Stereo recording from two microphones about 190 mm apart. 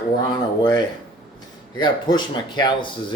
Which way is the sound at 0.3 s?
20° left (ahead or behind).